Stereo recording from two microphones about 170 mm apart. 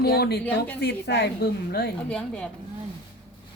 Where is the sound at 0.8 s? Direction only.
80° left.